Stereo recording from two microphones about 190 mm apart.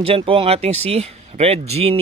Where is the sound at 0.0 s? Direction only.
30° right (ahead or behind).